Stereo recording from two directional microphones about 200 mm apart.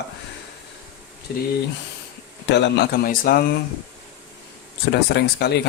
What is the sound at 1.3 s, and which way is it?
Speech, 50° left (ahead or behind).